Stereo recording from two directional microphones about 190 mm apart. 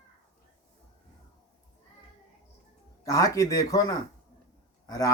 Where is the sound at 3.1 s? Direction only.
15° left (ahead or behind).